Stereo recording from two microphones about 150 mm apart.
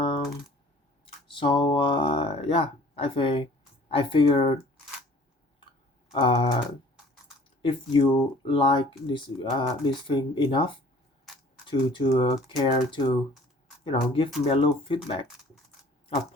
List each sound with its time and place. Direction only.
1.0 s a sound: 35° left (ahead or behind)
3.8 s speech: 35° left (ahead or behind)
6.1 s speech: 35° left (ahead or behind)
7.6 s speech: 35° left (ahead or behind)